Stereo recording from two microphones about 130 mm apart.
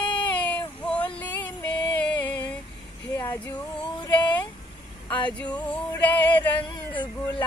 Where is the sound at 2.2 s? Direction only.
10° left (ahead or behind).